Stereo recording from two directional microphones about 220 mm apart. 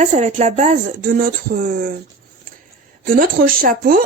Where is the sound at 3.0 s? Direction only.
40° right (ahead or behind).